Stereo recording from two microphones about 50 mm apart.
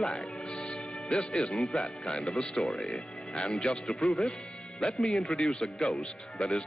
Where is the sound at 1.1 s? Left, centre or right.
Left.